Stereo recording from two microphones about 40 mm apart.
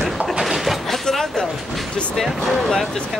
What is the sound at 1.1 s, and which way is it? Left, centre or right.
Speech, centre.